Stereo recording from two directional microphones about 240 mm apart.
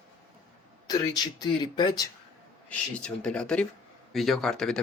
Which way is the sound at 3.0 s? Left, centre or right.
Centre.